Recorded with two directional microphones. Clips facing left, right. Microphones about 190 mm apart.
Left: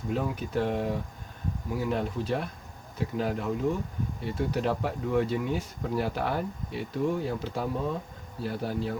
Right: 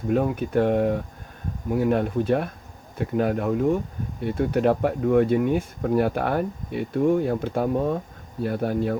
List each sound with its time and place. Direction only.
0.1 s speech: 55° right (ahead or behind)